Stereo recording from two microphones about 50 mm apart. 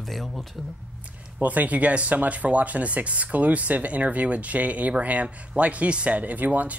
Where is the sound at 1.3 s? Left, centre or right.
Right.